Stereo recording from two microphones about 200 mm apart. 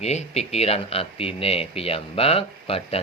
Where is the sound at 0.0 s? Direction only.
35° left (ahead or behind).